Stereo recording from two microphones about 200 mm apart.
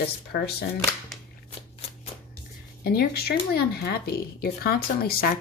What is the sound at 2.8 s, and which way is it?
Speech, 50° left (ahead or behind).